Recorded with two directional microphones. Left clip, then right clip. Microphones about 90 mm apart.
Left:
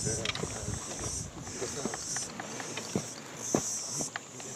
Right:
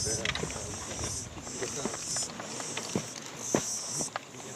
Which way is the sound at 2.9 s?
Centre (ahead or behind).